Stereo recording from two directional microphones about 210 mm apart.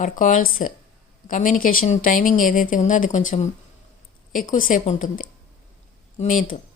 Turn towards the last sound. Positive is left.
turn(degrees=40)  # may be behind; listen again after turning